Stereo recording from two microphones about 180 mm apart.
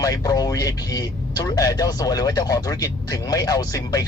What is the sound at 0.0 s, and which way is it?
Speech, 20° left (ahead or behind).